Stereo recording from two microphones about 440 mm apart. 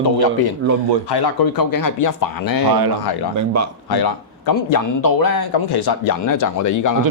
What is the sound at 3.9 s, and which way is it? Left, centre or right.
A man's voice, left.